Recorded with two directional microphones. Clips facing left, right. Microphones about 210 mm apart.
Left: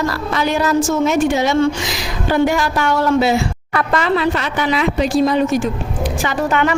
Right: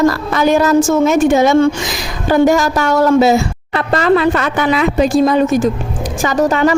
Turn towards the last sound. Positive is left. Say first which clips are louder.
# right 5 dB
turn(degrees=-35)  # may be behind; listen again after turning